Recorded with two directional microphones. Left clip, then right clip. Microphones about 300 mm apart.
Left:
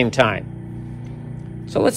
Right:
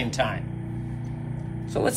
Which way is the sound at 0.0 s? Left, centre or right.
Centre.